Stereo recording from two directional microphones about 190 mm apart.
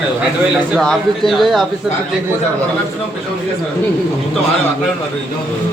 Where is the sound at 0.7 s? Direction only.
Centre (ahead or behind).